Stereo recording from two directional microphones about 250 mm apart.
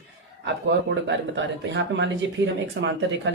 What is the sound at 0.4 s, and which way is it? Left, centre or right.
Speech, right.